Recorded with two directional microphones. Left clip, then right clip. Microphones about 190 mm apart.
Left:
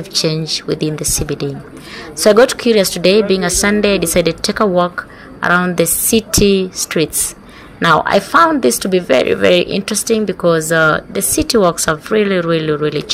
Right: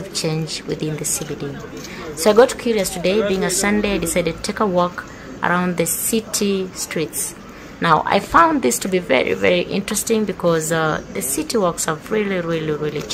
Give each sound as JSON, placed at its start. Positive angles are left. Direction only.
{"t": 0.2, "sound": "a woman's voice", "side_deg": 20}
{"t": 2.1, "sound": "a woman's voice", "side_deg": 20}